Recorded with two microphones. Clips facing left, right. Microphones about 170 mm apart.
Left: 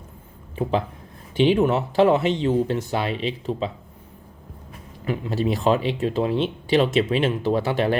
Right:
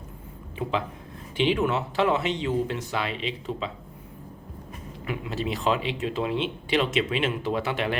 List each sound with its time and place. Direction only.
0.5 s speech: 40° left (ahead or behind)
5.0 s speech: 35° left (ahead or behind)